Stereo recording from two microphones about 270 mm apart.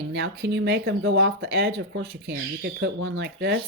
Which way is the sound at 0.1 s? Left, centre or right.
Right.